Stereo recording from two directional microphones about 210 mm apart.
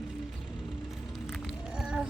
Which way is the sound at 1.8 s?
5° right (ahead or behind).